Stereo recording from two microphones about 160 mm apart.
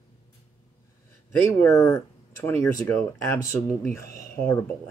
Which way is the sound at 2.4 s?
10° left (ahead or behind).